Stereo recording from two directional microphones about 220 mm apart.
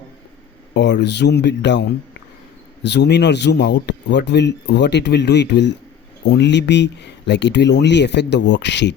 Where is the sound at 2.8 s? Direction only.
50° left (ahead or behind).